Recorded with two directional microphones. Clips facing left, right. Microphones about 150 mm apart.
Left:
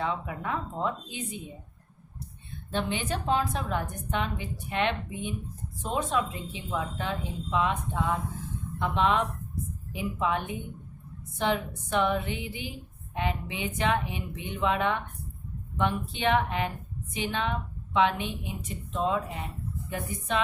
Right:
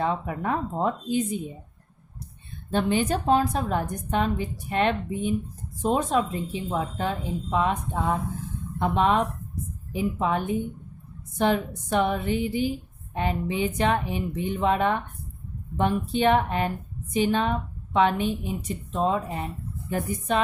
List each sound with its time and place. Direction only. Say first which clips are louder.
0.0 s a woman's voice: right 5 dB; 40° right (ahead or behind)
2.7 s a woman's voice: right 7 dB; 45° right (ahead or behind)